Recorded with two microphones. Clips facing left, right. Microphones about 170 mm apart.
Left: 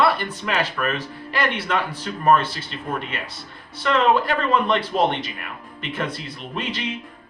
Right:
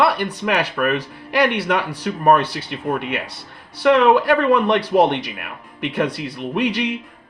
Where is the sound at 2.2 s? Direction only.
65° right (ahead or behind).